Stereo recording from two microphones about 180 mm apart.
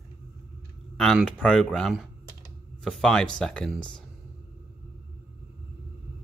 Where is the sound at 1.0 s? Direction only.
Centre (ahead or behind).